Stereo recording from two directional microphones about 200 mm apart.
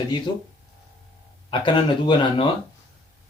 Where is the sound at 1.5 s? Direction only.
25° left (ahead or behind).